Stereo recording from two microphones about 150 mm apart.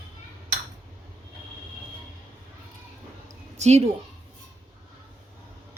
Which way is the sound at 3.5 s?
45° right (ahead or behind).